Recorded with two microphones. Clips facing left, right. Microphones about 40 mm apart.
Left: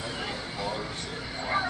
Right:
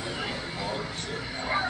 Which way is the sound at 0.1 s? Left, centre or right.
Centre.